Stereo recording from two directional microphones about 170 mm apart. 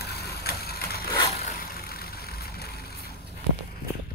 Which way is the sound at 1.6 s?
65° left (ahead or behind).